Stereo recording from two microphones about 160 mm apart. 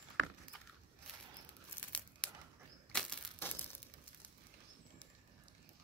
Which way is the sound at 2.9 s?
10° left (ahead or behind).